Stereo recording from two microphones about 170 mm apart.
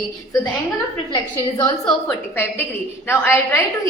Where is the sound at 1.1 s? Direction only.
25° left (ahead or behind).